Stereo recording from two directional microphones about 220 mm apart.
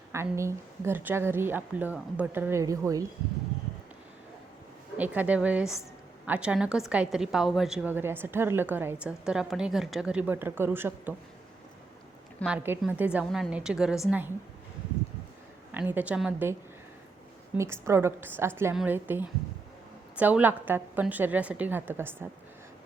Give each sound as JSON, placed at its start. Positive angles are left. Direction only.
{"t": 0.1, "sound": "a woman's voice", "side_deg": -10}
{"t": 4.9, "sound": "a woman's voice", "side_deg": -5}
{"t": 12.4, "sound": "a woman's voice", "side_deg": -5}
{"t": 15.7, "sound": "a woman's voice", "side_deg": -10}
{"t": 17.6, "sound": "a woman's voice", "side_deg": -10}